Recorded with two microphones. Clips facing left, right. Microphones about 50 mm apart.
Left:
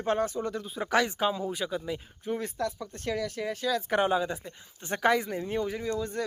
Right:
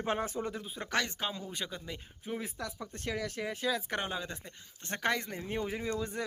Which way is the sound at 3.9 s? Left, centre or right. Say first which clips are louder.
Left 10 dB; centre.